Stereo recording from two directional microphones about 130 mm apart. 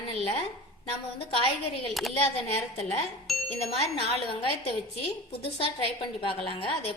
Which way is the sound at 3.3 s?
Centre (ahead or behind).